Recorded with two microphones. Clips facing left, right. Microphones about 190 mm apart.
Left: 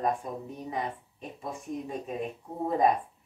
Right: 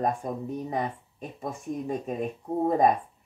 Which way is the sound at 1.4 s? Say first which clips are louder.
Right 3 dB; 45° right (ahead or behind).